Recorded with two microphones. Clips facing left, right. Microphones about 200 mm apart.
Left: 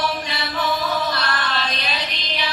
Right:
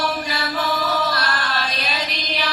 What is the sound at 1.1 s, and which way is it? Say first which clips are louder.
Music: even; 10° right (ahead or behind).